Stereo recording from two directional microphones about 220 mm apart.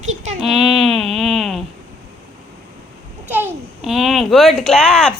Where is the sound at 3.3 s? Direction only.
5° right (ahead or behind).